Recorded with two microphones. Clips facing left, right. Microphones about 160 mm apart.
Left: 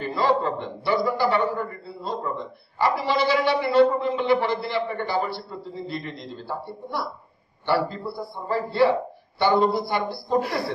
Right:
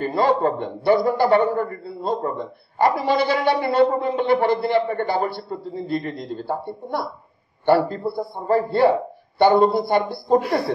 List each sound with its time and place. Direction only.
0.0 s a man's voice: 55° right (ahead or behind)